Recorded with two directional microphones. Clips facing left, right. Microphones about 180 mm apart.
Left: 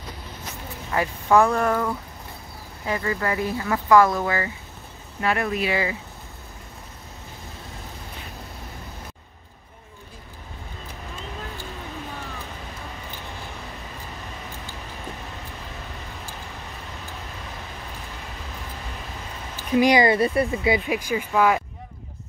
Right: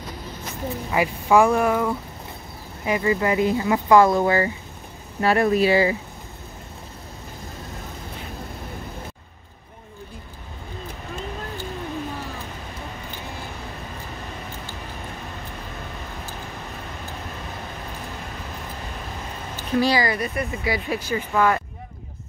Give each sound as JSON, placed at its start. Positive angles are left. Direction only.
{"t": 0.9, "sound": "speech", "side_deg": -10}
{"t": 19.7, "sound": "speech", "side_deg": 15}